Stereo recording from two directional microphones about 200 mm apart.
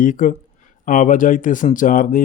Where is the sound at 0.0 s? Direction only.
40° left (ahead or behind).